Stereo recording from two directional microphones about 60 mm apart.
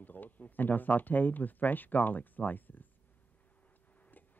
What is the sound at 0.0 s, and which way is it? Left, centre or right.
Speech, left.